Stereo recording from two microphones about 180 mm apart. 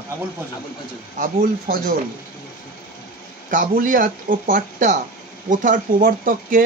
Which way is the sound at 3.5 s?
50° right (ahead or behind).